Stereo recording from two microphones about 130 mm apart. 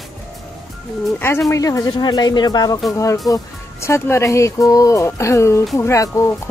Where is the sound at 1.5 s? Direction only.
25° left (ahead or behind).